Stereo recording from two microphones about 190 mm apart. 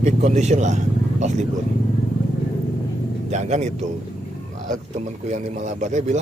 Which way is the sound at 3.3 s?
35° right (ahead or behind).